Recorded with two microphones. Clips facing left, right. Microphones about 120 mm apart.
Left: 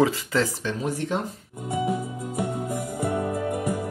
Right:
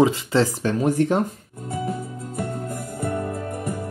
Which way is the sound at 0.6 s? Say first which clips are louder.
Right 8 dB; 50° right (ahead or behind).